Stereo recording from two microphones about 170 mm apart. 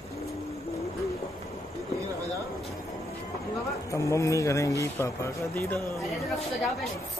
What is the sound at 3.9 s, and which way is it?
A man's voice, 20° left (ahead or behind).